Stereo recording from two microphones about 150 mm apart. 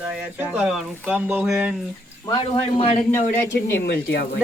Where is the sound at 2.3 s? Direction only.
30° left (ahead or behind).